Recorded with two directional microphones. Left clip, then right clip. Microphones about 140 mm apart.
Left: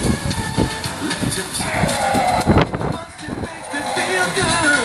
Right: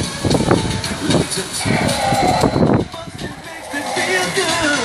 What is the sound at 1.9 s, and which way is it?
Music, 5° right (ahead or behind).